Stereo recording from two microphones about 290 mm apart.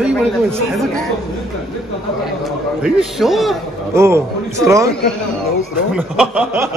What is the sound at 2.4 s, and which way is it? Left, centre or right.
A man's voice, centre.